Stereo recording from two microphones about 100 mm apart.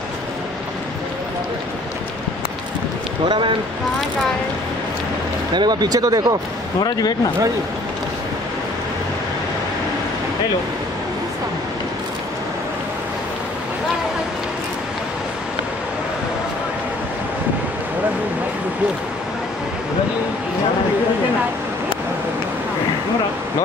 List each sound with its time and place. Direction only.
3.3 s speech: 55° right (ahead or behind)
5.5 s speech: 45° right (ahead or behind)
6.8 s speech: 40° left (ahead or behind)